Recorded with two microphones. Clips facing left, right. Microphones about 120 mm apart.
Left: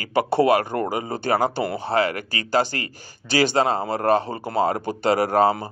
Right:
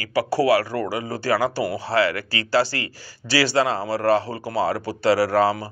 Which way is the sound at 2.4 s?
20° left (ahead or behind).